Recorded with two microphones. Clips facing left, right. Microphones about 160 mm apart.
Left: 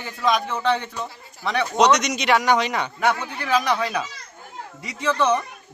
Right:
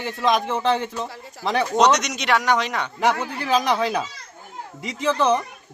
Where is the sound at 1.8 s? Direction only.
Centre (ahead or behind).